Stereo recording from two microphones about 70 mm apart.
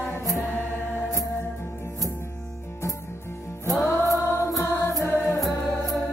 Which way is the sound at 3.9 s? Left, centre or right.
Left.